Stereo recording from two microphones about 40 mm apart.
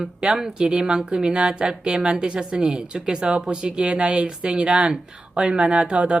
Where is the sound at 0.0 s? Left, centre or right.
Right.